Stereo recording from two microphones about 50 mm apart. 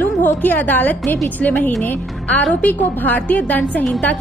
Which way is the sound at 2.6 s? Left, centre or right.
Left.